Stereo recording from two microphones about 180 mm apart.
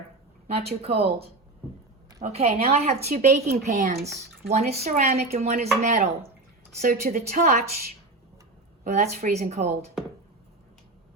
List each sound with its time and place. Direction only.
0.5 s speech: 35° right (ahead or behind)
8.8 s speech: 40° right (ahead or behind)